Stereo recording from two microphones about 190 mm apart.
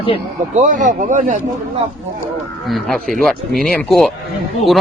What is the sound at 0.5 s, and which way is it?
Speech, 40° right (ahead or behind).